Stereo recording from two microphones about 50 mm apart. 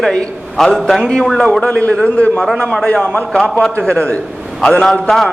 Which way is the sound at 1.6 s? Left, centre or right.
Left.